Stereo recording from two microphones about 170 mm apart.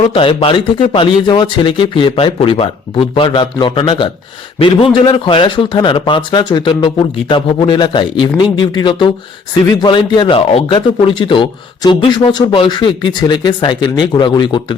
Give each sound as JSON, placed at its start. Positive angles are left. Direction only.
{"t": 0.0, "sound": "a man's voice", "side_deg": 30}